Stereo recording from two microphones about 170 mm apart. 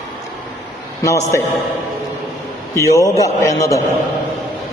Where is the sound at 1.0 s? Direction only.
20° left (ahead or behind).